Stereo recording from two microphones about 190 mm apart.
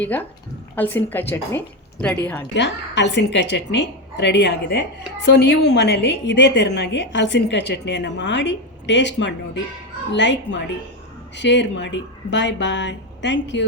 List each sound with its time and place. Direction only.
0.0 s a woman's voice: 10° left (ahead or behind)
2.6 s a woman's voice: 65° left (ahead or behind)